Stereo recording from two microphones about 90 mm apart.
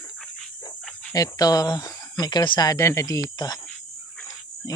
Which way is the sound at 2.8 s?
35° left (ahead or behind).